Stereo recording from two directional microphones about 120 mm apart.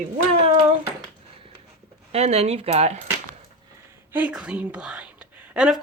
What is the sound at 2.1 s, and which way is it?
Speech, 60° right (ahead or behind).